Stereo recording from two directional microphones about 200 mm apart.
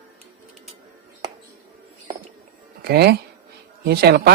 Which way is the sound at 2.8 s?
50° right (ahead or behind).